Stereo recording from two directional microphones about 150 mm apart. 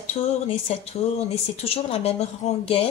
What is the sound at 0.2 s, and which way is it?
Speech, 45° left (ahead or behind).